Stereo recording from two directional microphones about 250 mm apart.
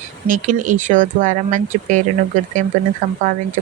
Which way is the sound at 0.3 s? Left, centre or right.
Right.